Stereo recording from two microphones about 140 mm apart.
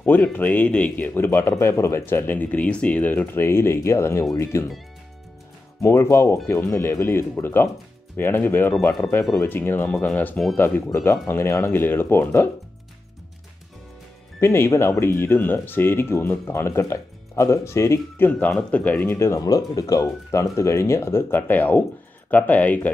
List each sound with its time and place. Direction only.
0.0 s speech: 15° left (ahead or behind)
5.8 s speech: 20° left (ahead or behind)
14.4 s speech: 20° left (ahead or behind)